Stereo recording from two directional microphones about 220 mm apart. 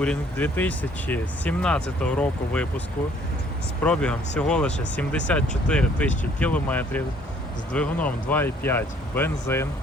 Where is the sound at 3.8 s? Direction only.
5° left (ahead or behind).